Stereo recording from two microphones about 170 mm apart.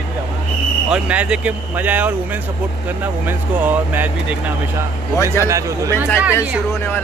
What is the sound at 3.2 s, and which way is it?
Speech, 10° right (ahead or behind).